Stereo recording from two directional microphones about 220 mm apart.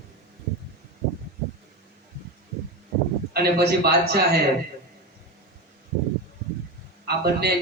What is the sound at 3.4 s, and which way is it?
A man's voice, 45° right (ahead or behind).